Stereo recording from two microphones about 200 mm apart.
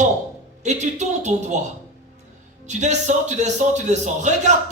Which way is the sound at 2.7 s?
35° right (ahead or behind).